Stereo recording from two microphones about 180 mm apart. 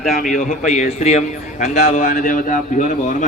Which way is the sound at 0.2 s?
45° left (ahead or behind).